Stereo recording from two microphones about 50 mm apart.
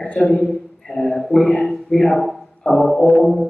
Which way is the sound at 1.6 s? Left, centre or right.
Centre.